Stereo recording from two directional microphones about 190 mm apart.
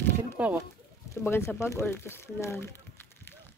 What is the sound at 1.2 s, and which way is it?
Speech, 15° left (ahead or behind).